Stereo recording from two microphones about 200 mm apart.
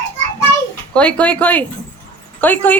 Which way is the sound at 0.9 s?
5° left (ahead or behind).